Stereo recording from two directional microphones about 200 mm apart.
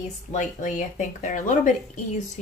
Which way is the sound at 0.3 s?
40° left (ahead or behind).